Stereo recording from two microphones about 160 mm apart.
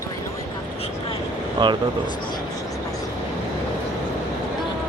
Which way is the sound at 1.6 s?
30° right (ahead or behind).